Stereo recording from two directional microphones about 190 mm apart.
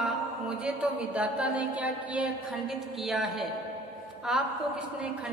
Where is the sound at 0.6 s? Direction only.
5° right (ahead or behind).